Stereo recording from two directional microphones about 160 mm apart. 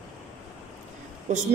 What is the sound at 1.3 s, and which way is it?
Speech, 50° right (ahead or behind).